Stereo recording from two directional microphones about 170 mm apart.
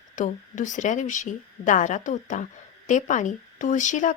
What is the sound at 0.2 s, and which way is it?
Speech, 50° left (ahead or behind).